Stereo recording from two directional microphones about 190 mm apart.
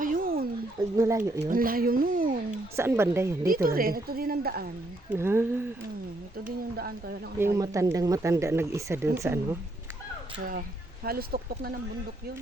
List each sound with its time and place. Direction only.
0.0 s a sound: 45° right (ahead or behind)
0.9 s speech: 15° right (ahead or behind)
1.5 s speech: 50° right (ahead or behind)
2.7 s speech: 10° right (ahead or behind)
3.5 s a woman's voice: 50° right (ahead or behind)
5.0 s speech: 10° right (ahead or behind)
7.3 s speech: 15° right (ahead or behind)
11.0 s a woman's voice: 55° right (ahead or behind)